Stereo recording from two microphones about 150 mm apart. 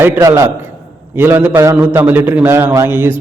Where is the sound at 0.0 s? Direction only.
20° right (ahead or behind).